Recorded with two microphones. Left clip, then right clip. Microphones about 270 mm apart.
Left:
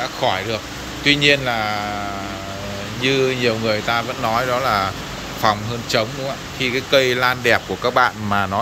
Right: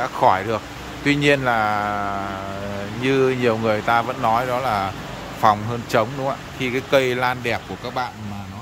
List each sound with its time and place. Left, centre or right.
0.0 s speech: centre
3.0 s speech: centre